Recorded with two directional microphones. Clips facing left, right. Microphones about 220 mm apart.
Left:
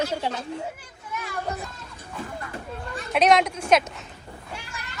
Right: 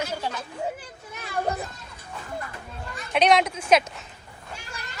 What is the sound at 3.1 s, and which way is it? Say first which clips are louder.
Speech: left 1 dB; centre (ahead or behind).